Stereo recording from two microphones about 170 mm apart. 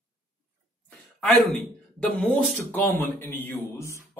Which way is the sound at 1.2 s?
5° left (ahead or behind).